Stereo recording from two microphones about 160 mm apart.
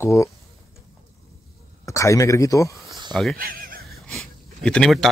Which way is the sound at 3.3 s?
65° right (ahead or behind).